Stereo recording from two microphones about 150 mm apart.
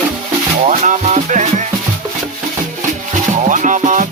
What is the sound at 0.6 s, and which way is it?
Music, 55° right (ahead or behind).